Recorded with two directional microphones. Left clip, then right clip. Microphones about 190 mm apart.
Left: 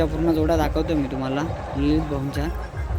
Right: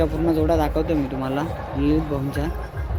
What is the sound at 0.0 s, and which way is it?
A man's voice, 5° right (ahead or behind).